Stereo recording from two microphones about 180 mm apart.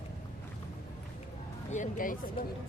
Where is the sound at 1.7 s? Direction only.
45° left (ahead or behind).